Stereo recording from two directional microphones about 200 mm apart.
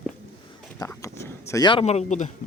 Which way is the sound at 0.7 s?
15° left (ahead or behind).